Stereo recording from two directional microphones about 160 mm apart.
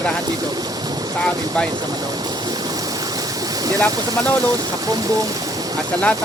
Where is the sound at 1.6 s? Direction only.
25° right (ahead or behind).